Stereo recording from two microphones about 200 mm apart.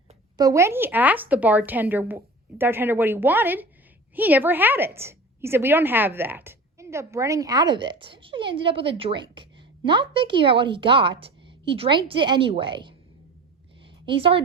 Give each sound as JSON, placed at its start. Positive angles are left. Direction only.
{"t": 0.3, "sound": "a woman's voice", "side_deg": -15}
{"t": 14.0, "sound": "a woman's voice", "side_deg": -25}